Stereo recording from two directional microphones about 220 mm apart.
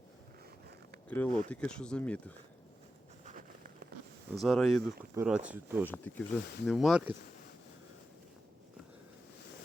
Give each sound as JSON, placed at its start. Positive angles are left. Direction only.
{"t": 1.0, "sound": "speech", "side_deg": 10}
{"t": 3.2, "sound": "a sound", "side_deg": -35}
{"t": 4.4, "sound": "speech", "side_deg": 0}
{"t": 5.9, "sound": "speech", "side_deg": 10}